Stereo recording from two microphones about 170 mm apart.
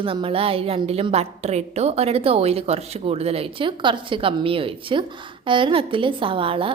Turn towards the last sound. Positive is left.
turn(degrees=-30)  # may be behind; listen again after turning